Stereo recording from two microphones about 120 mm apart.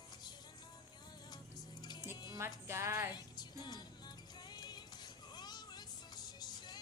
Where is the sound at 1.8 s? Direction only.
35° left (ahead or behind).